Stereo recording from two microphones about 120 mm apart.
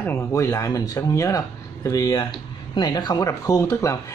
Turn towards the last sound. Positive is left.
turn(degrees=25)  # may be behind; listen again after turning